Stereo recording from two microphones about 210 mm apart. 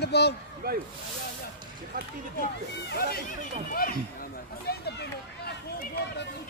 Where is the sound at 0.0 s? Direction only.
50° left (ahead or behind).